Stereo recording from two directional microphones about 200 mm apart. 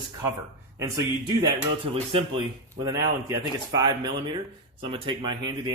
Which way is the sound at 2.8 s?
20° right (ahead or behind).